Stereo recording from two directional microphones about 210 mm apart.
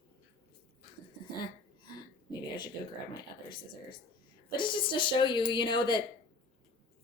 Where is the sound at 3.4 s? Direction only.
20° left (ahead or behind).